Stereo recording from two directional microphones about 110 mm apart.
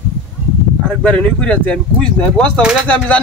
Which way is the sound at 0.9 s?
10° left (ahead or behind).